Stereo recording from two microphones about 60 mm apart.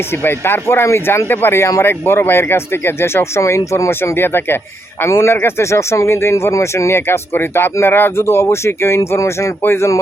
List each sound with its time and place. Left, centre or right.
0.2 s speech: left
8.2 s speech: left